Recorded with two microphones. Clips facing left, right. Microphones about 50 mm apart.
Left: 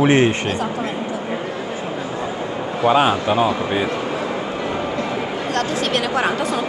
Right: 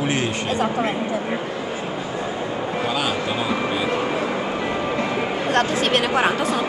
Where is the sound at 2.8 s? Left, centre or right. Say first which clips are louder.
Left 11 dB; left.